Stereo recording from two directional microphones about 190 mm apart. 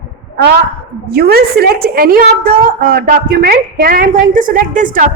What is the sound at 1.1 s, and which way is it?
A woman's voice, 55° right (ahead or behind).